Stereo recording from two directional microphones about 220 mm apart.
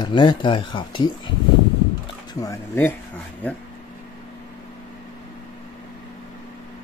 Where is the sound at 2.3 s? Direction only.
15° left (ahead or behind).